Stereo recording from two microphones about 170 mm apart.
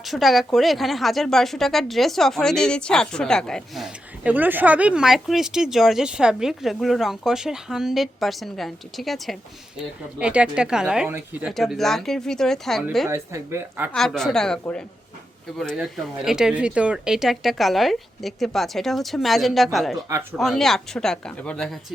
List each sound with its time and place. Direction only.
0.0 s a woman's voice: centre (ahead or behind)
13.1 s a woman's voice: 15° right (ahead or behind)
13.9 s speech: centre (ahead or behind)